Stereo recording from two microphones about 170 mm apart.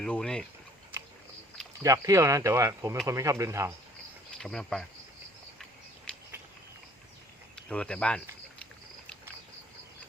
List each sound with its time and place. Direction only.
0.0 s speech: 5° left (ahead or behind)
1.8 s speech: 20° right (ahead or behind)
4.4 s speech: centre (ahead or behind)
6.1 s a sound: 5° left (ahead or behind)
7.5 s speech: 5° left (ahead or behind)